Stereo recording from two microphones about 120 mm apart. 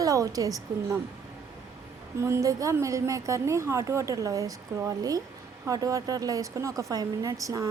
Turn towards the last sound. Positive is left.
turn(degrees=-30)  # may be behind; listen again after turning